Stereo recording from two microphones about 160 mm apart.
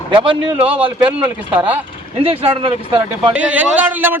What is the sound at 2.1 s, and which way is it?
Speech, 35° right (ahead or behind).